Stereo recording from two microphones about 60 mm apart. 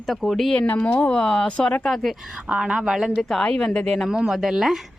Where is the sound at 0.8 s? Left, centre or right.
Left.